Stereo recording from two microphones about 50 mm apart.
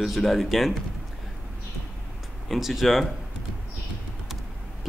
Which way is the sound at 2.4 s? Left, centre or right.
Centre.